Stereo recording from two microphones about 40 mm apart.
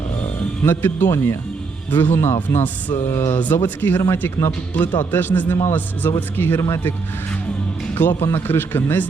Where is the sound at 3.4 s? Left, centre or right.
Left.